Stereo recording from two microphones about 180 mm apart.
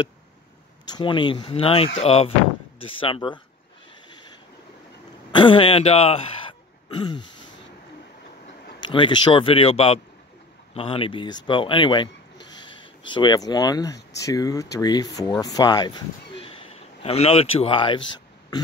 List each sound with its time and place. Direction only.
0.8 s speech: 25° left (ahead or behind)
5.3 s speech: 25° left (ahead or behind)
8.8 s speech: 25° left (ahead or behind)